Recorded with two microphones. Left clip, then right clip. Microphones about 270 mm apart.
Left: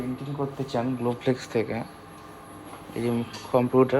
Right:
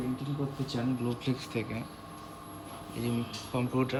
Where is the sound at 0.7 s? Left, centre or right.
Centre.